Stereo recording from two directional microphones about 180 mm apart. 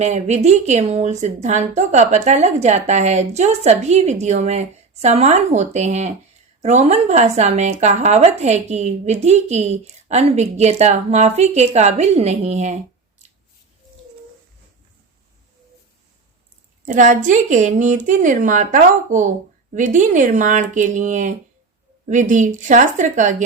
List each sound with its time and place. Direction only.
0.0 s a woman's voice: 40° right (ahead or behind)
16.8 s a woman's voice: 45° right (ahead or behind)